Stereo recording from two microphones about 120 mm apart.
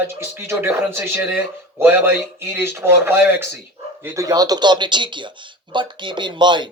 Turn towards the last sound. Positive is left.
turn(degrees=-40)  # may be behind; listen again after turning